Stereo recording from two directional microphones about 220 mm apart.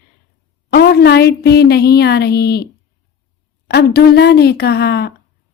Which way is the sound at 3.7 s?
45° left (ahead or behind).